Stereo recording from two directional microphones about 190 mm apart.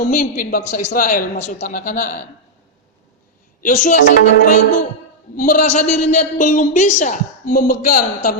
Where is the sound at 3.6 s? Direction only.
40° left (ahead or behind).